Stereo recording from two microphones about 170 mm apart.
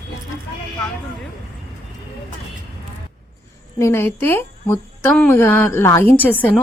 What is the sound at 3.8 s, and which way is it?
A woman's voice, 15° left (ahead or behind).